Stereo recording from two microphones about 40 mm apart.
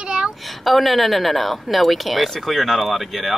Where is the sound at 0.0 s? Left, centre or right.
Right.